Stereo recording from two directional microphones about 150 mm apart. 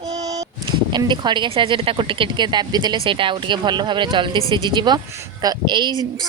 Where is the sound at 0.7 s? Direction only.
30° right (ahead or behind).